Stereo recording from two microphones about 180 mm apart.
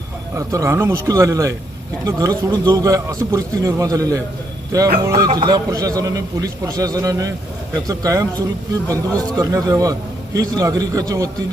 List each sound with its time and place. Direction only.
0.3 s a man's voice: 15° right (ahead or behind)